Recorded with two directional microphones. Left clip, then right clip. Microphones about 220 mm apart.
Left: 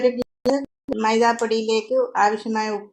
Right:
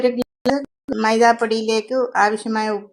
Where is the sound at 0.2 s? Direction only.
Centre (ahead or behind).